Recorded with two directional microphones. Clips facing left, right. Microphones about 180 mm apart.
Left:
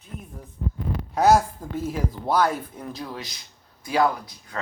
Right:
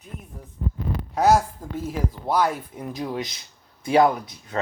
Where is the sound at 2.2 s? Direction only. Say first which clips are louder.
Left 1 dB; 15° right (ahead or behind).